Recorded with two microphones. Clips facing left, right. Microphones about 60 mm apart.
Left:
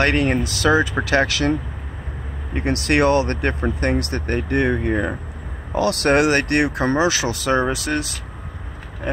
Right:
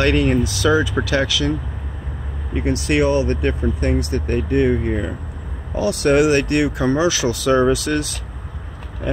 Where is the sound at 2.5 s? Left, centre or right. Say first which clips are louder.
Even; left.